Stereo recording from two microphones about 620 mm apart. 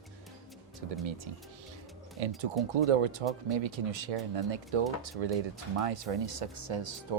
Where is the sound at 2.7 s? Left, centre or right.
Right.